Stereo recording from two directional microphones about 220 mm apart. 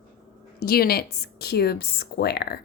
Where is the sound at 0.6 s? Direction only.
45° left (ahead or behind).